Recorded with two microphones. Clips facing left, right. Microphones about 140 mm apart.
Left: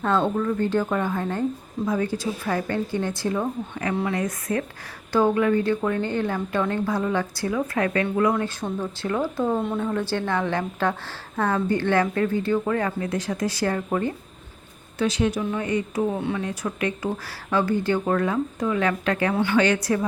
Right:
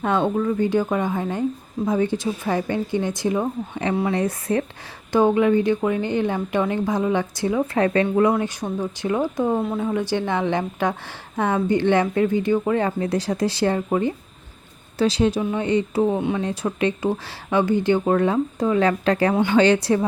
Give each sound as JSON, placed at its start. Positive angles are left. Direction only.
{"t": 0.2, "sound": "a woman's voice", "side_deg": -10}
{"t": 5.1, "sound": "speech", "side_deg": -20}
{"t": 9.6, "sound": "speech", "side_deg": -5}
{"t": 14.9, "sound": "speech", "side_deg": -35}
{"t": 16.1, "sound": "speech", "side_deg": -15}
{"t": 16.4, "sound": "speech", "side_deg": -30}
{"t": 19.3, "sound": "speech", "side_deg": -20}
{"t": 19.5, "sound": "speech", "side_deg": -30}